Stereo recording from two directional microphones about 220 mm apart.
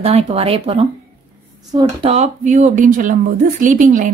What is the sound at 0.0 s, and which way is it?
Speech, 25° right (ahead or behind).